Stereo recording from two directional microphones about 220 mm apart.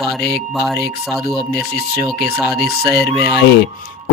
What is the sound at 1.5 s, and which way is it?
Speech, 45° left (ahead or behind).